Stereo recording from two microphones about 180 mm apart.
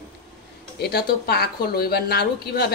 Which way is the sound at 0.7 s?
60° left (ahead or behind).